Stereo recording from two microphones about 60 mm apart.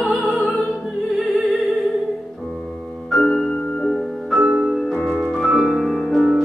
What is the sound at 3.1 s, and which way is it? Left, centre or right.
Music, centre.